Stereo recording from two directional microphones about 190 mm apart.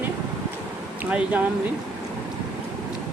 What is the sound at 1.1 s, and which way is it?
Speech, 5° right (ahead or behind).